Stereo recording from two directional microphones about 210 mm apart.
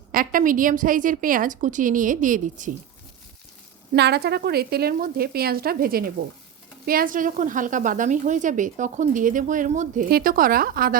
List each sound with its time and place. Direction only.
0.1 s a woman's voice: 40° right (ahead or behind)
3.9 s a woman's voice: 50° right (ahead or behind)